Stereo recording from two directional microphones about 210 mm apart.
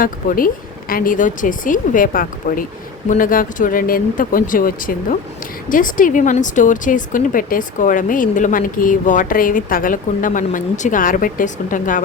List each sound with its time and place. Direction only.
0.0 s a woman's voice: 40° left (ahead or behind)